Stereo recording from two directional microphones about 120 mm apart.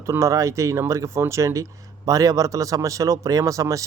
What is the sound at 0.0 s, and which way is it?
Speech, 25° right (ahead or behind).